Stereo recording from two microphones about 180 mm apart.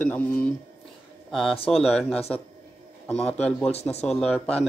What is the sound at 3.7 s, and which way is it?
Speech, 35° left (ahead or behind).